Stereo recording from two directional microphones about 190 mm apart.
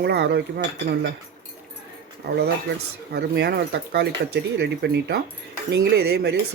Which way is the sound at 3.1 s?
60° right (ahead or behind).